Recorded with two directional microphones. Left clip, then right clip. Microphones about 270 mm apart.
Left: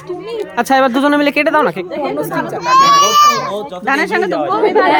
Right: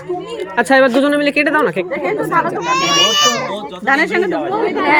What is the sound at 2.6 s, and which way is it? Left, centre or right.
A woman's voice, centre.